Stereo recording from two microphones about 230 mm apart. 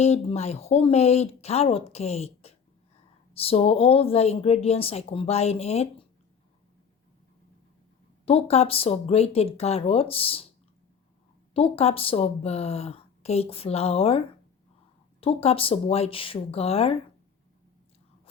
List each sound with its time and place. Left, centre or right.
0.0 s a woman's voice: left
8.2 s a woman's voice: left
11.5 s a woman's voice: left
15.2 s a woman's voice: left